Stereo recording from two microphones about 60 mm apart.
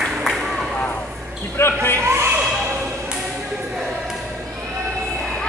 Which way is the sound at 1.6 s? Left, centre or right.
Left.